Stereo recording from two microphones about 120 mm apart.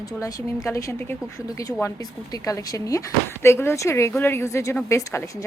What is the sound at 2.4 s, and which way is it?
Speech, 30° left (ahead or behind).